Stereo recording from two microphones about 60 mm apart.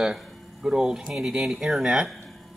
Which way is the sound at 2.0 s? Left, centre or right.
Centre.